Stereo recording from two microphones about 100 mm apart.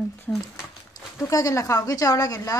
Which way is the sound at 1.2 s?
35° left (ahead or behind).